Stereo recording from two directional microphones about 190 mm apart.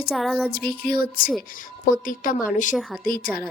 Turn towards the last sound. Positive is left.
turn(degrees=50)  # may be behind; listen again after turning